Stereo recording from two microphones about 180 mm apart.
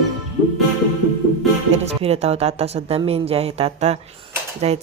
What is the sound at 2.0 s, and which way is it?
Speech, 35° right (ahead or behind).